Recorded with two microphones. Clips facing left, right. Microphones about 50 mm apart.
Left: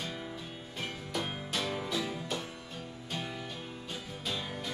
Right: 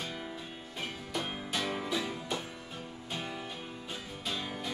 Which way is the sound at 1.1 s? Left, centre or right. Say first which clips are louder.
Even; centre.